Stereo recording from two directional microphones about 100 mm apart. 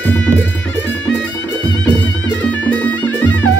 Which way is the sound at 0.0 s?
15° left (ahead or behind).